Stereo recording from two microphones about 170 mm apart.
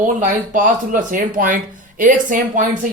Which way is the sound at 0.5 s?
50° right (ahead or behind).